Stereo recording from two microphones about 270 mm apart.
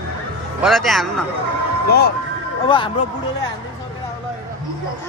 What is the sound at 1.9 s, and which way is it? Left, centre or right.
Speech, left.